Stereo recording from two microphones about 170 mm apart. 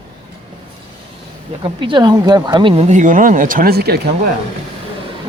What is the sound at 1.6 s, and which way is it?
Speech, 30° right (ahead or behind).